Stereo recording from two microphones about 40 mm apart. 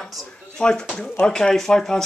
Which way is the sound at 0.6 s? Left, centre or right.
Centre.